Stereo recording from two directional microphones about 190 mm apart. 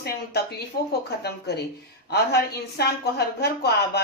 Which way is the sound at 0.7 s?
55° left (ahead or behind).